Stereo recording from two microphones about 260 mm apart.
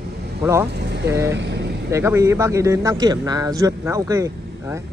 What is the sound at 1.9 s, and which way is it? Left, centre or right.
Speech, centre.